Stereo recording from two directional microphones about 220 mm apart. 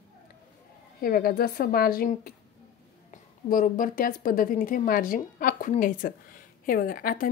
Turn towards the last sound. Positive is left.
turn(degrees=40)  # may be behind; listen again after turning